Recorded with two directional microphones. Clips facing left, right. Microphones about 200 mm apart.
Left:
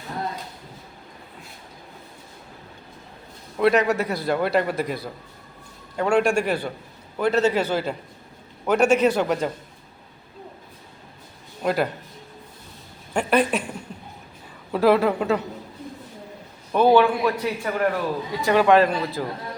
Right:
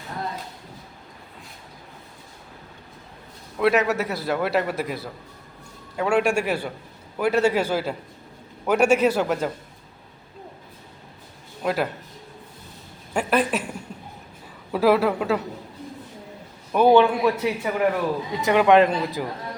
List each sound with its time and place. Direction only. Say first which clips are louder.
3.6 s a man's voice: left 1 dB; 5° right (ahead or behind)
11.6 s speech: left 2 dB; centre (ahead or behind)
13.1 s a man's voice: left 1 dB; centre (ahead or behind)
14.7 s a man's voice: left 1 dB; 5° right (ahead or behind)
16.7 s a man's voice: right 1 dB; 15° right (ahead or behind)
17.1 s a man's voice: right 1 dB; 5° right (ahead or behind)
18.3 s a man's voice: even; 20° right (ahead or behind)